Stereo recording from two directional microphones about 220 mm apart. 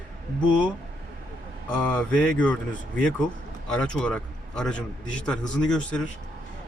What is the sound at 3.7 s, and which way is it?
A man's voice, 5° left (ahead or behind).